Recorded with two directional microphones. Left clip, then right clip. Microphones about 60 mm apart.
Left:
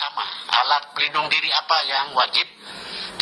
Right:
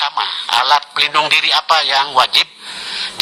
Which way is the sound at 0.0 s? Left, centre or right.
Right.